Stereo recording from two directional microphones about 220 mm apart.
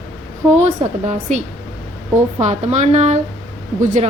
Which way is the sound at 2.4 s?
30° right (ahead or behind).